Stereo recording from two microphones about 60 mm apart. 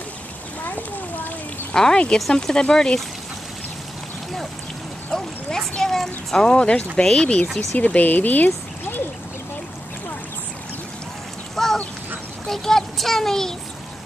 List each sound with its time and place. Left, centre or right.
0.7 s children playing: left
1.7 s speech: centre
5.1 s speech: centre; by 8.5 s left
11.5 s duck: centre
12.4 s speech: centre